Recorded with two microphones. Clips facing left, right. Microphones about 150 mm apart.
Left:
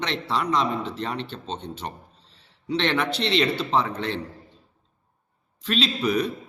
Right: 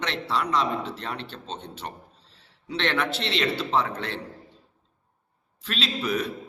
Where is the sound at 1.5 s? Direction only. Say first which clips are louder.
Left 2 dB; 30° left (ahead or behind).